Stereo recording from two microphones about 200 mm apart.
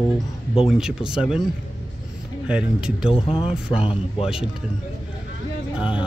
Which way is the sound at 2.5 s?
5° right (ahead or behind).